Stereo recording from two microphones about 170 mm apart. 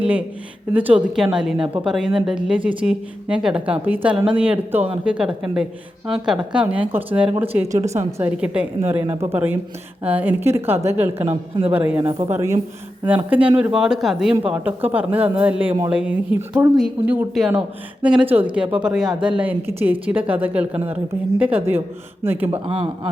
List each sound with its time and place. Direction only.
0.0 s a woman's voice: 10° right (ahead or behind)
11.3 s speech: 35° right (ahead or behind)
11.7 s a woman's voice: 10° right (ahead or behind)
22.5 s speech: 30° right (ahead or behind)